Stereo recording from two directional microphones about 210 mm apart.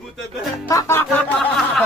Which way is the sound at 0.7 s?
10° left (ahead or behind).